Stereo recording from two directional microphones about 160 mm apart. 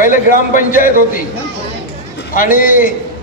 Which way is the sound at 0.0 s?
55° left (ahead or behind).